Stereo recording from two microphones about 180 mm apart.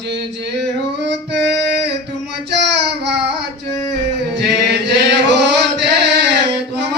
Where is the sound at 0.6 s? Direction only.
70° right (ahead or behind).